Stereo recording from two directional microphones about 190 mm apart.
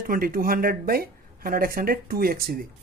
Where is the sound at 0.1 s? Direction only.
50° right (ahead or behind).